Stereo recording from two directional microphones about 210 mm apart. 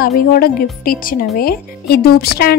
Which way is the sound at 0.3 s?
45° left (ahead or behind).